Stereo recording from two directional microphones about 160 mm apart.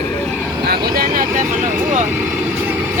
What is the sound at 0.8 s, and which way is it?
Speech, 65° right (ahead or behind).